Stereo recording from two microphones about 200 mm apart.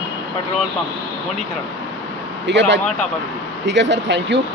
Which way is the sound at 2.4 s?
60° right (ahead or behind).